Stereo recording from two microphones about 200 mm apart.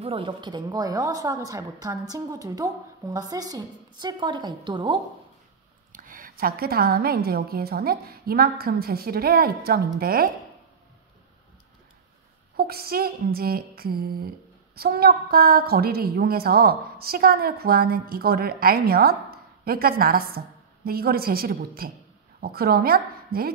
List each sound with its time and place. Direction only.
0.0 s a woman's voice: 25° right (ahead or behind)
5.9 s a woman's voice: 45° right (ahead or behind)
12.5 s a woman's voice: 50° right (ahead or behind)